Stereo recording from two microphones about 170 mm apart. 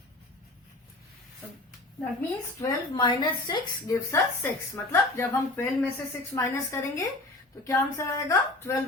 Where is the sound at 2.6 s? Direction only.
25° left (ahead or behind).